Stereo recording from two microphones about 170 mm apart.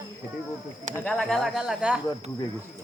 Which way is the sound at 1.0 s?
5° left (ahead or behind).